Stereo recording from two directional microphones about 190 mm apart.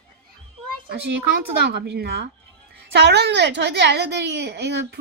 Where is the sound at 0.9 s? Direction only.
60° right (ahead or behind).